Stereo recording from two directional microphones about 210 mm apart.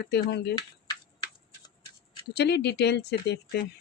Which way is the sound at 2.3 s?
50° left (ahead or behind).